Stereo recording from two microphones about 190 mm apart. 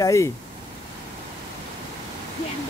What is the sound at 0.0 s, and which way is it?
Speech, 15° left (ahead or behind).